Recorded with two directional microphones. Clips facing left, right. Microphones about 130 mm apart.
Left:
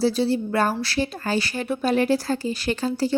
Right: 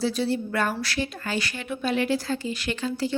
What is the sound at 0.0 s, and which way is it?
A woman's voice, 30° left (ahead or behind).